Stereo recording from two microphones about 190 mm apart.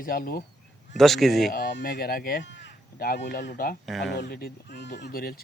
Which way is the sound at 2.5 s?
65° left (ahead or behind).